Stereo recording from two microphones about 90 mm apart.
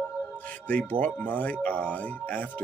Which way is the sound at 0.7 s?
15° left (ahead or behind).